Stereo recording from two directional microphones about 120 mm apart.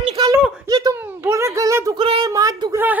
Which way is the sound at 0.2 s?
35° right (ahead or behind).